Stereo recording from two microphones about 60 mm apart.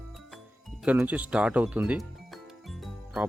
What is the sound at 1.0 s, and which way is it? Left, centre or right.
Speech, right.